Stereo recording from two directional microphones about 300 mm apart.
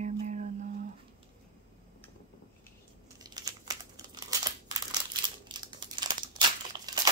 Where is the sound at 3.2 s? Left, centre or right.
Centre.